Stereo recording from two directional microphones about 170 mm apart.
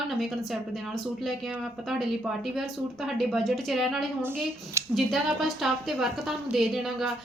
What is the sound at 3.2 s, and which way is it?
A woman's voice, centre (ahead or behind).